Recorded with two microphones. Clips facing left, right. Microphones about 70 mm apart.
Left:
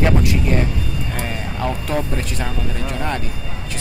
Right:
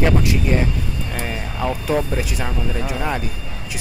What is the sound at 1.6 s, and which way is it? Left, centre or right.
Speech, centre.